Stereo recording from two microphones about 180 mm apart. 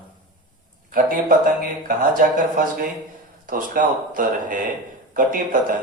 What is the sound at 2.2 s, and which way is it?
Speech, 50° right (ahead or behind).